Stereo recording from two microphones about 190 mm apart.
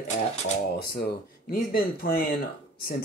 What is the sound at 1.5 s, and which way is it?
Speech, 50° left (ahead or behind).